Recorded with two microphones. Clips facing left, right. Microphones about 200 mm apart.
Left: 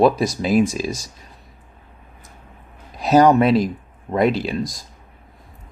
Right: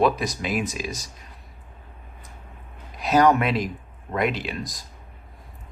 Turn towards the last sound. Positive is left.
turn(degrees=30)  # may be behind; listen again after turning